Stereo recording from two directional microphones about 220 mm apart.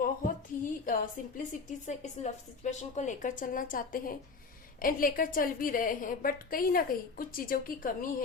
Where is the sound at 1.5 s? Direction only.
35° left (ahead or behind).